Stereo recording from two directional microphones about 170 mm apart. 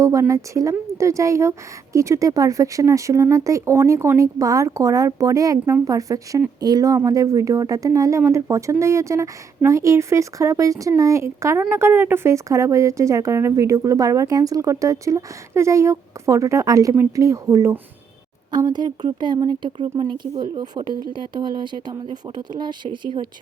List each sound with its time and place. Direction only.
0.0 s a woman's voice: 20° right (ahead or behind)